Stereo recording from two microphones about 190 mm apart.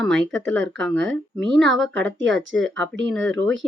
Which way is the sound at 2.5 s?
75° right (ahead or behind).